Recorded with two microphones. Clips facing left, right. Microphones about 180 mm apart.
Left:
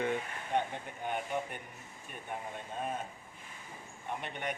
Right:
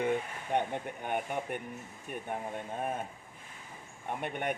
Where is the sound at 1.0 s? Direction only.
55° right (ahead or behind).